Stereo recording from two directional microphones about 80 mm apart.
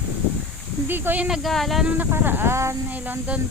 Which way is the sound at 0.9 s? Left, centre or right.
Right.